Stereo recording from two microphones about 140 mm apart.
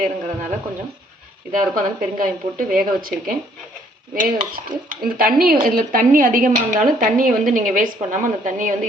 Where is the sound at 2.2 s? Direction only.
75° right (ahead or behind).